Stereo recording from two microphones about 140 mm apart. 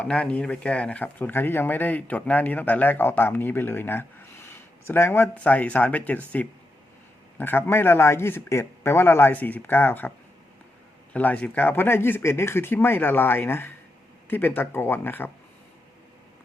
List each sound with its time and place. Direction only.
0.0 s speech: 10° left (ahead or behind)
11.1 s speech: 10° left (ahead or behind)